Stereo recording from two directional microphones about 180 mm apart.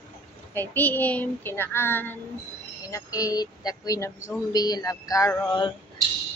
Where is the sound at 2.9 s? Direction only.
20° left (ahead or behind).